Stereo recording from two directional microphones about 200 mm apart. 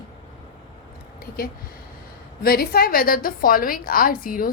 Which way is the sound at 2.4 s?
50° left (ahead or behind).